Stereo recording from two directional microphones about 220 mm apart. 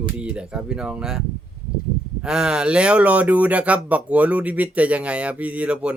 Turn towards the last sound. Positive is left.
turn(degrees=-5)  # may be behind; listen again after turning